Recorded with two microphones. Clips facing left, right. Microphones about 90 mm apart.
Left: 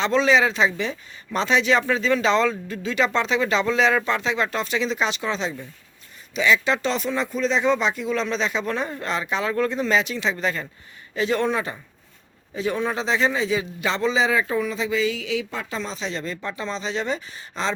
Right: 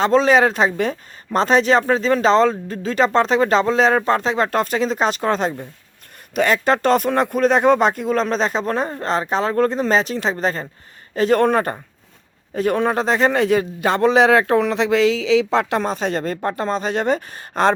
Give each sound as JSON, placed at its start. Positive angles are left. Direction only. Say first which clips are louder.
{"t": 0.0, "sound": "a man's voice", "louder": "right 5 dB", "side_deg": -45}